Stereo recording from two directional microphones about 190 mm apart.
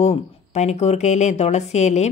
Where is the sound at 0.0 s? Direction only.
35° left (ahead or behind).